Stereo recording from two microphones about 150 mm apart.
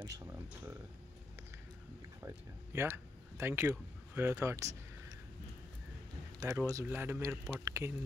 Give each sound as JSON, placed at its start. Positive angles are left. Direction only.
{"t": 0.0, "sound": "speech", "side_deg": -15}
{"t": 2.2, "sound": "speech", "side_deg": -15}
{"t": 6.4, "sound": "a man's voice", "side_deg": -20}